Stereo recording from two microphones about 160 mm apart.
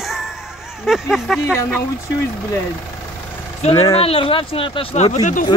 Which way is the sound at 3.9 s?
35° left (ahead or behind).